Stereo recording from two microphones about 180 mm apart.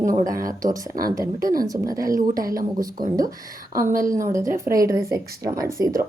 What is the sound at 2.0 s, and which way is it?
Speech, 50° right (ahead or behind).